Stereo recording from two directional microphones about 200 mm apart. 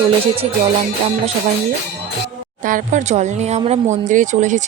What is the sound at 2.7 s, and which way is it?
Speech, 40° right (ahead or behind).